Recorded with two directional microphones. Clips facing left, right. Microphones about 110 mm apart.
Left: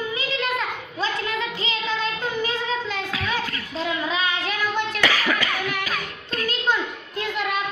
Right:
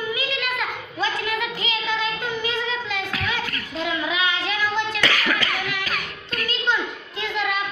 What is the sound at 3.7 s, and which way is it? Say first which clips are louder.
Child singing: even; 35° left (ahead or behind).